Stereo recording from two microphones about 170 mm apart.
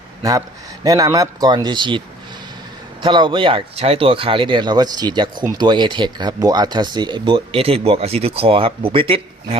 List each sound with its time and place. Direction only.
0.2 s speech: 20° right (ahead or behind)
3.0 s speech: 30° right (ahead or behind)